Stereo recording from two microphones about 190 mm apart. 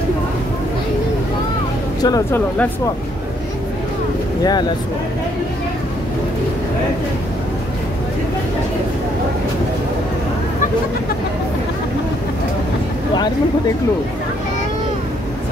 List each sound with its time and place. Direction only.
2.0 s speech: 20° left (ahead or behind)
4.4 s speech: 20° left (ahead or behind)